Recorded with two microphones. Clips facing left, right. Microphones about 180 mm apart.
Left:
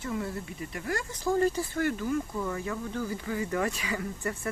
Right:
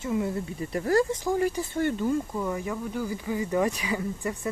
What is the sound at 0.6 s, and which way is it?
Speech, 35° right (ahead or behind).